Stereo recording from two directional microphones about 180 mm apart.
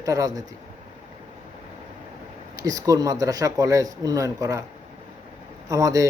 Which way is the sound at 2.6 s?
20° right (ahead or behind).